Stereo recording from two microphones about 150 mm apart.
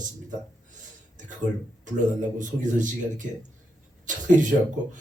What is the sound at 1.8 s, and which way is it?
Speech, 60° right (ahead or behind).